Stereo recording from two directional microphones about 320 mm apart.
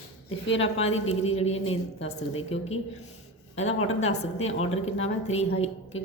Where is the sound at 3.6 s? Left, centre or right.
Left.